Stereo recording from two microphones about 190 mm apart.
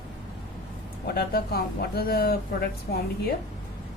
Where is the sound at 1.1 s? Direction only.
55° left (ahead or behind).